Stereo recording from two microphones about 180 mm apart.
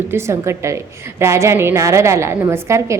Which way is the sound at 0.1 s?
15° right (ahead or behind).